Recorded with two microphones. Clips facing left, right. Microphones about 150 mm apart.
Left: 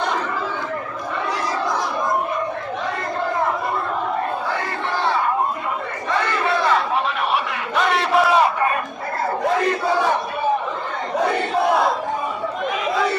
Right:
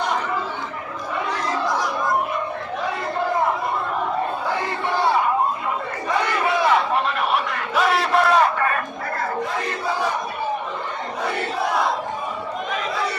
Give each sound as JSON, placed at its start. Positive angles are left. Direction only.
{"t": 7.5, "sound": "battle cry", "side_deg": 0}